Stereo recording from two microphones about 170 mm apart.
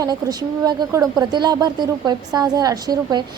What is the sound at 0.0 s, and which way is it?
A woman's voice, 20° right (ahead or behind).